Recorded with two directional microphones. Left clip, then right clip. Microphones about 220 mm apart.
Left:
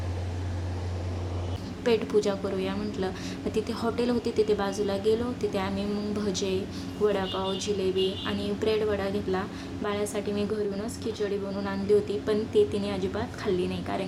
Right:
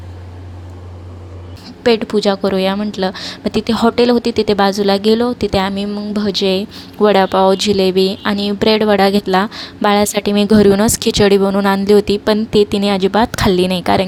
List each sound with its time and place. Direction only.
1.8 s a woman's voice: 35° right (ahead or behind)